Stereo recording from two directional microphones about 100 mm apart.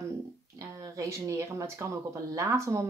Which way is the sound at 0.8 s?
35° right (ahead or behind).